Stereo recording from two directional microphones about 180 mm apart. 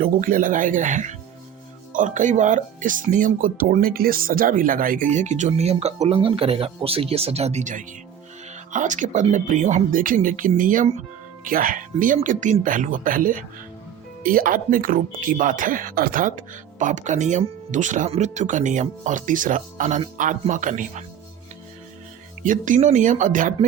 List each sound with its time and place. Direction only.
0.0 s speech: 50° right (ahead or behind)
22.4 s speech: 45° right (ahead or behind)